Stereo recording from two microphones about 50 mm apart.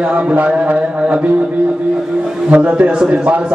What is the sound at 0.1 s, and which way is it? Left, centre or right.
A man's voice, right.